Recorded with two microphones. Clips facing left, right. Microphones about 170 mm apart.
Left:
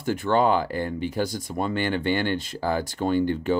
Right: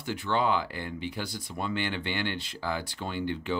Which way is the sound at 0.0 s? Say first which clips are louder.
Left 7 dB; 45° left (ahead or behind).